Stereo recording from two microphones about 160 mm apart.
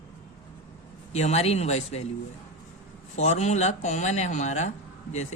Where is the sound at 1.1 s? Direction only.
45° left (ahead or behind).